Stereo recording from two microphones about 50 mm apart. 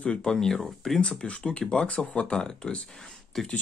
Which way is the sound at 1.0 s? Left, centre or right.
Left.